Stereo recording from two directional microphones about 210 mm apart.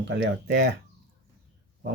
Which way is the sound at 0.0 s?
55° right (ahead or behind).